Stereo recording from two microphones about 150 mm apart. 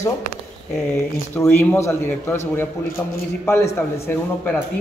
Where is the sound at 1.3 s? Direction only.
15° left (ahead or behind).